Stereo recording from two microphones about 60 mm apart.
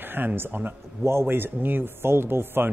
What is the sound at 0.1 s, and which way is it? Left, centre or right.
Speech, right.